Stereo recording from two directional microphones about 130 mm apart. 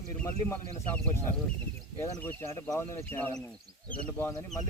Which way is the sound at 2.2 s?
20° left (ahead or behind).